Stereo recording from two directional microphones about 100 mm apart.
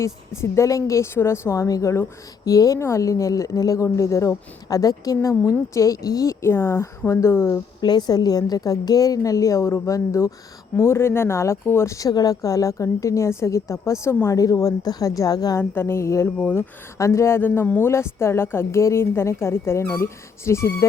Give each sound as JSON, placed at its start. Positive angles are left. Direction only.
{"t": 0.0, "sound": "a woman's voice", "side_deg": 30}
{"t": 7.8, "sound": "a woman's voice", "side_deg": 45}
{"t": 15.5, "sound": "speech", "side_deg": 25}